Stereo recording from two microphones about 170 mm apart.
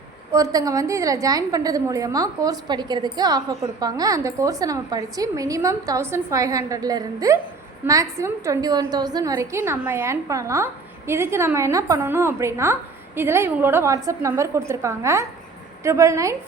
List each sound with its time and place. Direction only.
0.3 s a woman's voice: 20° right (ahead or behind)